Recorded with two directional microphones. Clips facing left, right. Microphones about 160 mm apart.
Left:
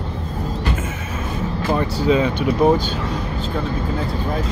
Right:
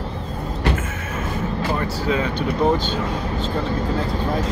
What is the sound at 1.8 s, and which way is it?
Speech, 20° left (ahead or behind).